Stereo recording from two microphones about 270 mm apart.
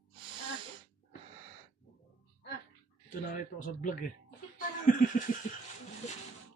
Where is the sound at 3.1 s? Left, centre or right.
Left.